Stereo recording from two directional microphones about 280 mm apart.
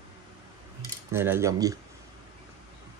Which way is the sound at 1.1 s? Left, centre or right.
Centre.